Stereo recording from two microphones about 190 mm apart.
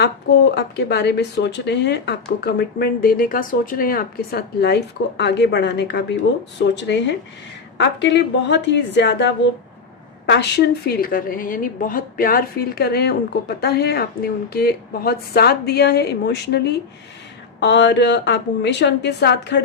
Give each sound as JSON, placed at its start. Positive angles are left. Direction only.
{"t": 0.5, "sound": "a woman's voice", "side_deg": 60}